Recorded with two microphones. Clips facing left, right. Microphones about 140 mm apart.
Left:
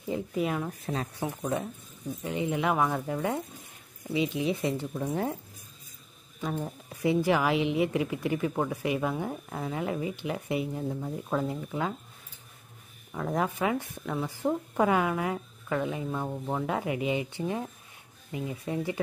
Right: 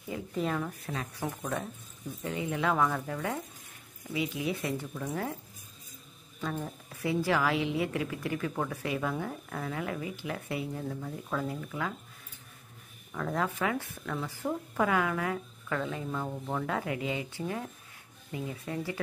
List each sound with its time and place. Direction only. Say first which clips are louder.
0.3 s speech: even; 10° left (ahead or behind)
0.7 s a woman's voice: left 4 dB; 25° left (ahead or behind)
6.4 s a woman's voice: left 2 dB; 15° left (ahead or behind)
13.1 s a woman's voice: left 2 dB; 20° left (ahead or behind)